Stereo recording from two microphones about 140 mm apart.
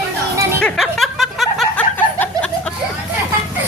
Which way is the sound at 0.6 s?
5° left (ahead or behind).